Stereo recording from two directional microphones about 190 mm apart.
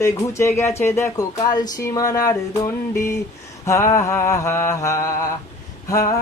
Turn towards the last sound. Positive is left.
turn(degrees=15)  # may be behind; listen again after turning